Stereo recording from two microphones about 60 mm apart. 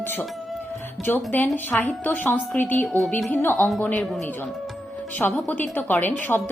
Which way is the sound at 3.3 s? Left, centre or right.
Left.